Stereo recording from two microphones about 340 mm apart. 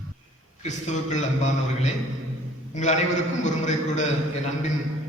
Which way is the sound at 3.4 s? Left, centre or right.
Left.